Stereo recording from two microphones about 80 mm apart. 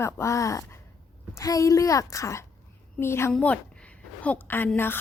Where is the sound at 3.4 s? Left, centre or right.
Centre.